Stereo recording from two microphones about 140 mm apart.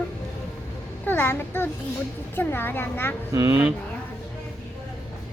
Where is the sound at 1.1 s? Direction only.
15° left (ahead or behind).